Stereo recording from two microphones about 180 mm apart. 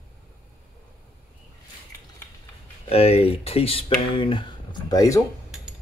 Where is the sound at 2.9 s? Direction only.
35° left (ahead or behind); by 5.2 s 20° left (ahead or behind).